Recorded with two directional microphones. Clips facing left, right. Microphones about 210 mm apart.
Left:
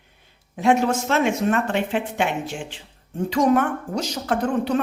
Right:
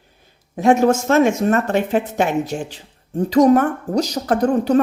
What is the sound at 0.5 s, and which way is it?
A woman's voice, 45° right (ahead or behind).